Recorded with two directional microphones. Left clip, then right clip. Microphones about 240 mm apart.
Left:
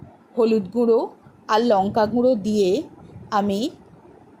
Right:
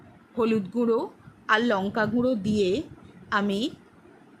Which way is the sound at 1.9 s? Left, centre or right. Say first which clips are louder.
Left 7 dB; centre.